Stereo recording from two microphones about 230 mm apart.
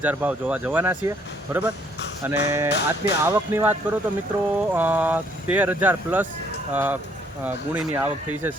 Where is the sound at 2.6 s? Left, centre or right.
Left.